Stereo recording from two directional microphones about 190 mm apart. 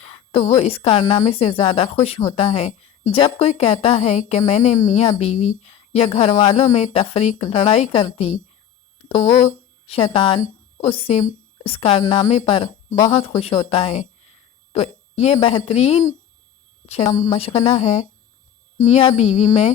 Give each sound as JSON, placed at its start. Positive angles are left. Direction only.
{"t": 0.0, "sound": "a woman's voice", "side_deg": 30}